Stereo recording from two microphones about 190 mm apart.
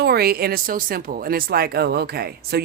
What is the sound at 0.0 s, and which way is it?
A woman's voice, 55° right (ahead or behind).